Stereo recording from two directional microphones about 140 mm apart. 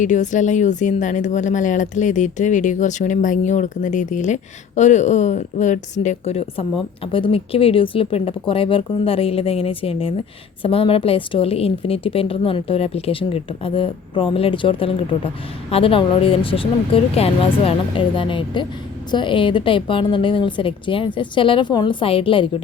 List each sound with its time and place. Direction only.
0.0 s a woman's voice: 60° left (ahead or behind); by 22.4 s 40° left (ahead or behind)